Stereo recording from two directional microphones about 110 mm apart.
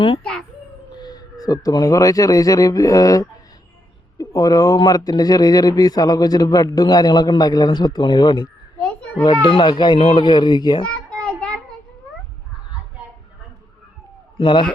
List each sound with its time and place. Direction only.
0.2 s a child's voice: 10° left (ahead or behind)
1.0 s speech: 35° left (ahead or behind)
8.8 s children playing: 10° left (ahead or behind)
9.2 s speech: 45° left (ahead or behind)
10.8 s a sound: 10° left (ahead or behind)
14.3 s speech: 45° left (ahead or behind)